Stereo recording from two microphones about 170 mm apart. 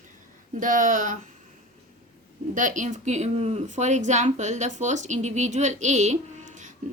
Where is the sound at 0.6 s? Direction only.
50° right (ahead or behind).